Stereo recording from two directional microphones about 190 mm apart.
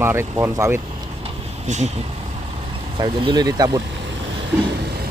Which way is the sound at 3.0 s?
25° right (ahead or behind).